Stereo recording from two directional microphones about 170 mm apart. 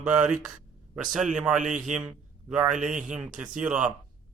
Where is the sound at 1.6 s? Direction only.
45° right (ahead or behind).